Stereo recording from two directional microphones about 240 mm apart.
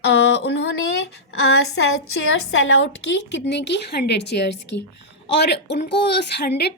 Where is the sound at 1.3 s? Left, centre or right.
Left.